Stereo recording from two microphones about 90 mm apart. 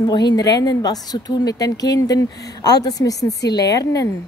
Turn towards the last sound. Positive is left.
turn(degrees=35)  # may be behind; listen again after turning